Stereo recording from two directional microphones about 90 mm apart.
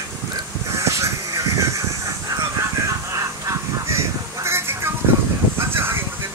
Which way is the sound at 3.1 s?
35° right (ahead or behind).